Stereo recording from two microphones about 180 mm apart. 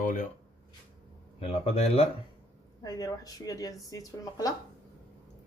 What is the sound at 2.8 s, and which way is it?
Speech, 20° left (ahead or behind).